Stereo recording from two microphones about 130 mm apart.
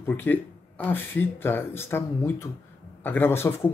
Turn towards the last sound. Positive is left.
turn(degrees=20)  # may be behind; listen again after turning